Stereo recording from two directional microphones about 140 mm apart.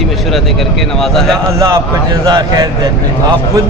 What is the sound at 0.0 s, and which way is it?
Speech, centre (ahead or behind).